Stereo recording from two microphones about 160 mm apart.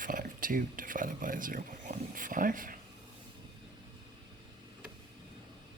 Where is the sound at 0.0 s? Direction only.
60° right (ahead or behind).